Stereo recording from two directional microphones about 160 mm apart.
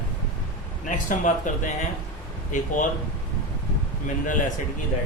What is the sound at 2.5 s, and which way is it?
Speech, 55° left (ahead or behind).